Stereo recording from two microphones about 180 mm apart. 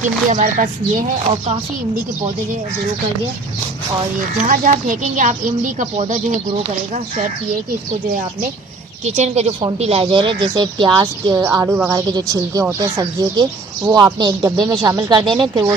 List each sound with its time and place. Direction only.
0.0 s speech: 40° right (ahead or behind)
4.5 s speech: 45° right (ahead or behind)
9.0 s speech: 40° right (ahead or behind)